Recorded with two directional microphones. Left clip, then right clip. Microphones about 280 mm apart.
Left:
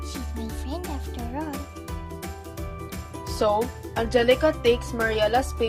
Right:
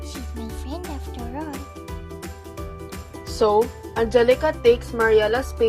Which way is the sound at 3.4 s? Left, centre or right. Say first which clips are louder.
Right 5 dB; right.